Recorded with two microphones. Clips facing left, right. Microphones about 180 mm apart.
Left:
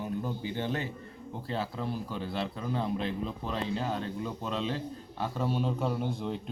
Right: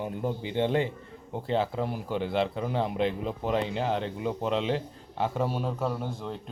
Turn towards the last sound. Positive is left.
turn(degrees=0)  # may be behind; listen again after turning